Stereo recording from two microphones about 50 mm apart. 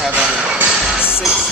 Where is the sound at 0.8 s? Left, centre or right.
Centre.